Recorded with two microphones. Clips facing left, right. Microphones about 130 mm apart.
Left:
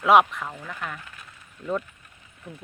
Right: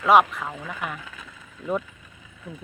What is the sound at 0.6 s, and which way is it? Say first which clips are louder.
Speech: right 2 dB; 10° right (ahead or behind).